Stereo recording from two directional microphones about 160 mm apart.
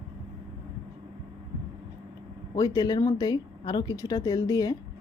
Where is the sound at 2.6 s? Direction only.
20° left (ahead or behind).